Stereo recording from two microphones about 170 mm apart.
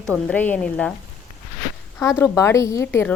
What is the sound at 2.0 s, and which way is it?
Speech, 15° left (ahead or behind).